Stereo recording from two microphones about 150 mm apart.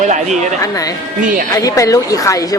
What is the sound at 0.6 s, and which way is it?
A woman's voice, 20° left (ahead or behind).